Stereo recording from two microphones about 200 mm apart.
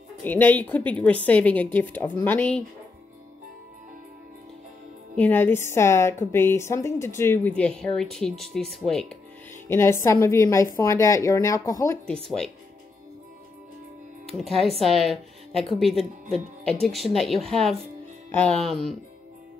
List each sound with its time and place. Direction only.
0.2 s a woman's voice: 10° left (ahead or behind)
5.1 s a woman's voice: 10° left (ahead or behind)
9.7 s a woman's voice: 10° left (ahead or behind)
14.4 s speech: centre (ahead or behind)